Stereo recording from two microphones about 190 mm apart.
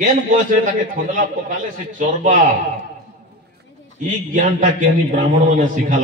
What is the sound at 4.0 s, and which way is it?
A man's voice, 40° right (ahead or behind).